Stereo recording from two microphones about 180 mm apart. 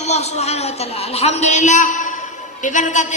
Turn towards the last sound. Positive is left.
turn(degrees=40)  # may be behind; listen again after turning